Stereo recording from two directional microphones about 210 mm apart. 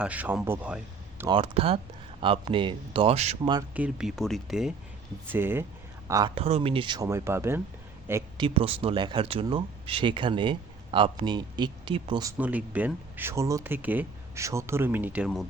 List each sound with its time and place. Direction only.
0.0 s speech: 5° right (ahead or behind)
1.3 s speech: 25° right (ahead or behind)
3.8 s speech: 5° right (ahead or behind)
8.4 s speech: 25° right (ahead or behind)
12.4 s speech: 5° right (ahead or behind)